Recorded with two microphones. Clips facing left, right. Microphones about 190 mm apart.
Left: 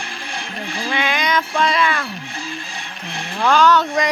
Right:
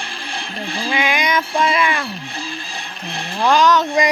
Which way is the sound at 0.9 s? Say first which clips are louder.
Right 1 dB; 15° right (ahead or behind).